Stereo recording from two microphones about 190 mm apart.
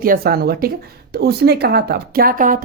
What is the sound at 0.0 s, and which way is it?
A woman's voice, 50° right (ahead or behind).